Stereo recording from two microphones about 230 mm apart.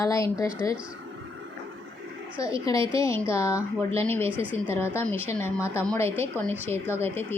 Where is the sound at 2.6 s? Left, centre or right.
Centre.